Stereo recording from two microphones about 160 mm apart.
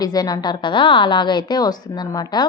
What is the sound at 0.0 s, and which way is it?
A woman's voice, 25° left (ahead or behind).